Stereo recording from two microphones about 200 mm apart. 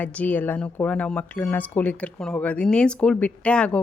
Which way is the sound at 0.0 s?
10° left (ahead or behind).